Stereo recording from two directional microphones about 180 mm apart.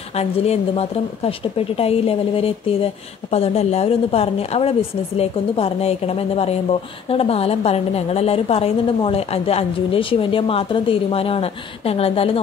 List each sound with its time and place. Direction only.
0.1 s a woman's voice: 35° left (ahead or behind)